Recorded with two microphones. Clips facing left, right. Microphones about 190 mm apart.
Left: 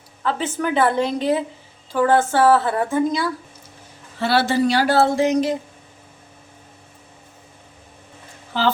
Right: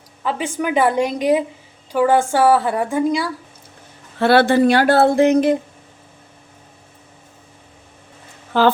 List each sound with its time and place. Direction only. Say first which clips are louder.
0.2 s a woman's voice: right 1 dB; 10° right (ahead or behind)
4.2 s speech: right 5 dB; 55° right (ahead or behind)
8.5 s speech: right 6 dB; 55° right (ahead or behind)